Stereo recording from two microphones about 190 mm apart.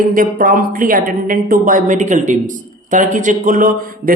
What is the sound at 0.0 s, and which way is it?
Speech, 45° right (ahead or behind).